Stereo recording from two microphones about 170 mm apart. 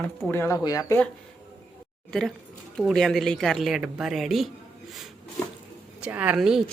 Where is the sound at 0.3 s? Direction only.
15° left (ahead or behind).